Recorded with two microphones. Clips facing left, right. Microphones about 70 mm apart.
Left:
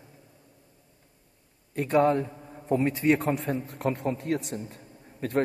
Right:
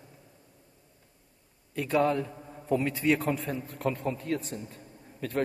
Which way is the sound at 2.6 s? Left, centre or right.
Left.